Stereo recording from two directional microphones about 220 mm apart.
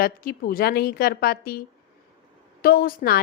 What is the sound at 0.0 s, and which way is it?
A woman's voice, 40° left (ahead or behind).